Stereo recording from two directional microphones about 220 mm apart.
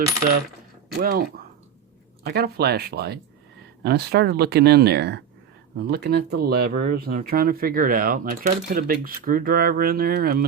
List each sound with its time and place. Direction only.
0.9 s speech: 40° right (ahead or behind)
2.2 s speech: 45° right (ahead or behind)